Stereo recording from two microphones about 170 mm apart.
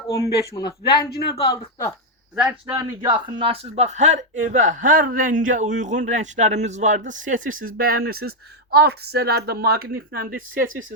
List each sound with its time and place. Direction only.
0.5 s speech: 25° left (ahead or behind)
1.1 s speech: 75° left (ahead or behind)
2.3 s speech: 5° right (ahead or behind)
2.7 s speech: 20° right (ahead or behind)
3.3 s speech: 35° right (ahead or behind); by 10.4 s 60° right (ahead or behind)